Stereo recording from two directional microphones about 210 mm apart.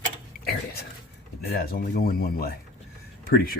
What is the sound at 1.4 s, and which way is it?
Speech, 50° left (ahead or behind).